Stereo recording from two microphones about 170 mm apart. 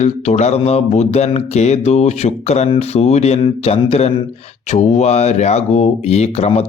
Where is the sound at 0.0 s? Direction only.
40° left (ahead or behind).